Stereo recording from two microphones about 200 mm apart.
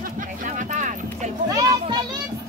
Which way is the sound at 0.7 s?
40° right (ahead or behind).